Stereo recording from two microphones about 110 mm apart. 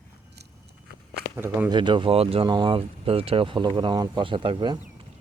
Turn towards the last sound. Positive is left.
turn(degrees=-45)  # may be behind; listen again after turning